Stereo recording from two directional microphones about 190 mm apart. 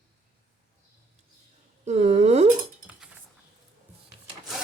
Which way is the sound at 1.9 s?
35° right (ahead or behind).